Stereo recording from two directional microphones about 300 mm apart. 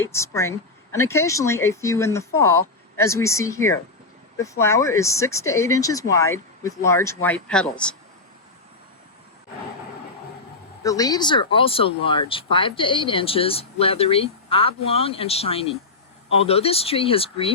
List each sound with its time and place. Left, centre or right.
0.0 s speech: centre
10.8 s speech: centre